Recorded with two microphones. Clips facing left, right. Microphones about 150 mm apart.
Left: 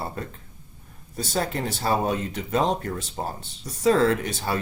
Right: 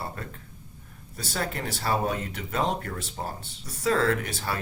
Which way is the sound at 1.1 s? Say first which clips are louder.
Left 5 dB; 25° left (ahead or behind).